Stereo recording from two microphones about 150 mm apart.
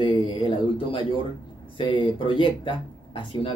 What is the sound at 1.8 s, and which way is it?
Speech, 30° left (ahead or behind).